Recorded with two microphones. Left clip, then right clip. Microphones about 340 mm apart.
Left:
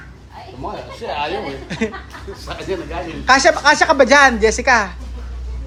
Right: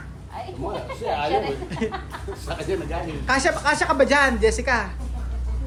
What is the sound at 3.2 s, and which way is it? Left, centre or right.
A woman's voice, centre.